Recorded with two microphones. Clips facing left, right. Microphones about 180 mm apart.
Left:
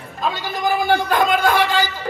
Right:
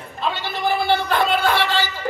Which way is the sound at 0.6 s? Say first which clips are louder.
Left 2 dB; 15° left (ahead or behind).